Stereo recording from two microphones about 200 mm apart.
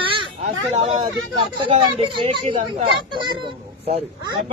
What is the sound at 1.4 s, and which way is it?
A man's voice, 25° right (ahead or behind).